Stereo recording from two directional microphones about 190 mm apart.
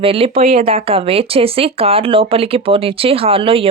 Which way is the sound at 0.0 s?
30° right (ahead or behind).